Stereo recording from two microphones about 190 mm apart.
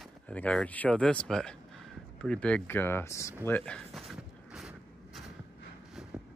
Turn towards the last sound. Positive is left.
turn(degrees=0)  # may be behind; listen again after turning